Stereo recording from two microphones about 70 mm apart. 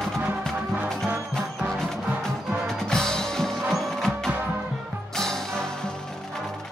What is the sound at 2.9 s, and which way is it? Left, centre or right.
Music, centre.